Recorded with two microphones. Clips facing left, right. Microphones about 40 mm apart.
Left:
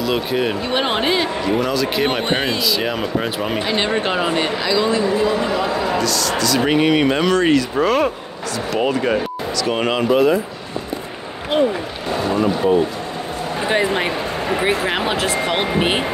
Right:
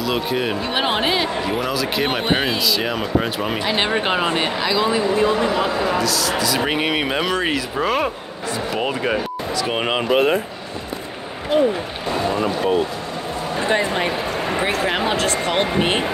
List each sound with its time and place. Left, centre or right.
0.0 s speech: centre
5.9 s speech: centre
9.6 s speech: centre
10.1 s speech: right
13.7 s speech: centre